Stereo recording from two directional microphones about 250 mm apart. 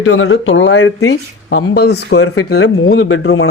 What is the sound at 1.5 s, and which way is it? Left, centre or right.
Speech, left.